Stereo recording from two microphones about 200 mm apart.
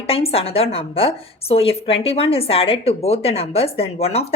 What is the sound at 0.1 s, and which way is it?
A woman's voice, 30° left (ahead or behind).